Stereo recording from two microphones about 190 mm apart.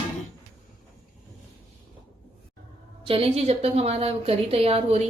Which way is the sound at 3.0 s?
30° right (ahead or behind).